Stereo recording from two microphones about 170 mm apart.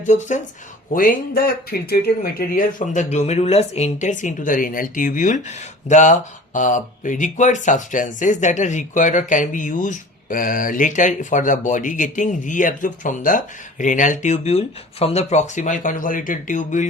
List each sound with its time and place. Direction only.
0.0 s speech: 45° left (ahead or behind)
0.9 s speech: 55° left (ahead or behind)
2.5 s speech: 55° left (ahead or behind)